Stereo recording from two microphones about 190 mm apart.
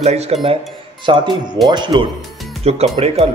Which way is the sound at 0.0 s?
35° right (ahead or behind).